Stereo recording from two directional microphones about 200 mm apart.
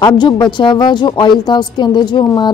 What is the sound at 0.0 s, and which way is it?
A woman's voice, 20° left (ahead or behind).